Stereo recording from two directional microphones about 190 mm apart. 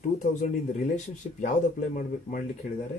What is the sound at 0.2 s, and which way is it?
Speech, 40° left (ahead or behind).